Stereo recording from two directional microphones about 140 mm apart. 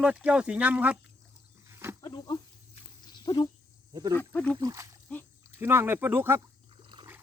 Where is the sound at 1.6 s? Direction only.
20° right (ahead or behind).